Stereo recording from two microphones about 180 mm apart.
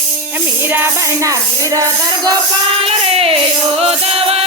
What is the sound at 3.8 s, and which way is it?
Music, 35° right (ahead or behind).